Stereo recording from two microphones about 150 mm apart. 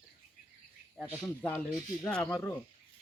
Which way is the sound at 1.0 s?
15° left (ahead or behind).